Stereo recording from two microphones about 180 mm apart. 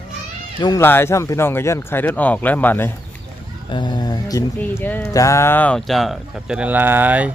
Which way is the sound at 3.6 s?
25° left (ahead or behind).